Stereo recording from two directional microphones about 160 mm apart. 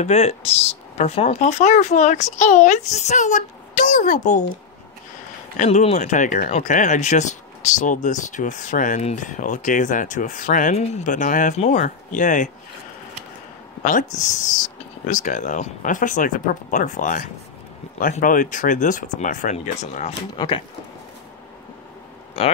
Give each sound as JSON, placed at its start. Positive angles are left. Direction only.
{"t": 0.0, "sound": "speech", "side_deg": 45}
{"t": 5.6, "sound": "speech", "side_deg": 45}
{"t": 13.8, "sound": "speech", "side_deg": 55}
{"t": 20.3, "sound": "speech", "side_deg": 30}